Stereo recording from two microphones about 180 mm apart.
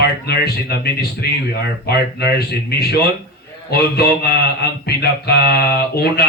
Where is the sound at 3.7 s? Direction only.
60° left (ahead or behind).